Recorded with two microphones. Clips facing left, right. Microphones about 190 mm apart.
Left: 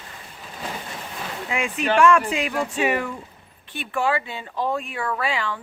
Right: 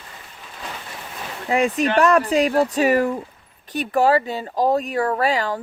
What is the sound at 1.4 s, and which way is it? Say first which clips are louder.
Speech: right 6 dB; 40° right (ahead or behind).